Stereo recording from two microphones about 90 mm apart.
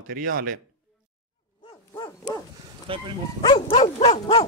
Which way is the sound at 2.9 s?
80° right.